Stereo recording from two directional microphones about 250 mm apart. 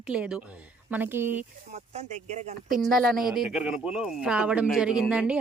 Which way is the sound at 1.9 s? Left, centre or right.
Right.